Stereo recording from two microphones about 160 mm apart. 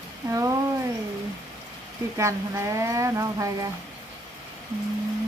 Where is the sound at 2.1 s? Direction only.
20° right (ahead or behind).